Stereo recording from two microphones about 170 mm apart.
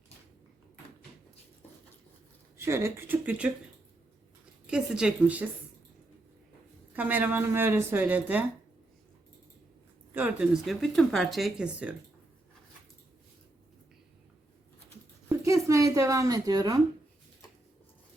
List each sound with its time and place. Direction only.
2.6 s a woman's voice: 15° right (ahead or behind)
4.6 s speech: 5° right (ahead or behind)
6.9 s a woman's voice: 10° right (ahead or behind)
10.2 s speech: 10° right (ahead or behind)
15.3 s speech: 15° right (ahead or behind)